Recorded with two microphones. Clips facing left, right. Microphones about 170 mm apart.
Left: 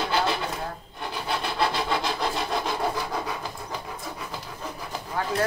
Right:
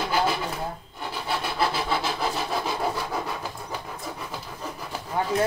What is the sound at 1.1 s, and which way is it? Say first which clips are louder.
Wood: even; 5° right (ahead or behind).